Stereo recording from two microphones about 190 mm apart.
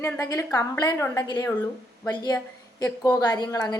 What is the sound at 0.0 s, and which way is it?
A woman's voice, 15° left (ahead or behind).